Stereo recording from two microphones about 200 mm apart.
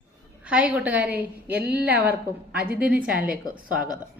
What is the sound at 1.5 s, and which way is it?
Speech, 55° right (ahead or behind).